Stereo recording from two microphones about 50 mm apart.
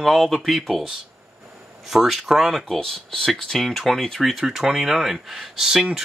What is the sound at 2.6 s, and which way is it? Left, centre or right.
Speech, centre.